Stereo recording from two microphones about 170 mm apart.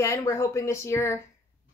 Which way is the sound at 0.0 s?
15° left (ahead or behind).